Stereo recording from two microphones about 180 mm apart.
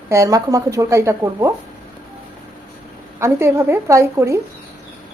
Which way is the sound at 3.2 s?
15° right (ahead or behind).